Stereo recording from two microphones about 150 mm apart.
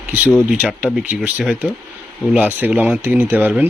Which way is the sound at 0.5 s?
10° right (ahead or behind).